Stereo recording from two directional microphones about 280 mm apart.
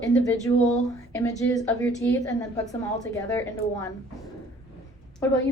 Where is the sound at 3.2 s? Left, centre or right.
Centre.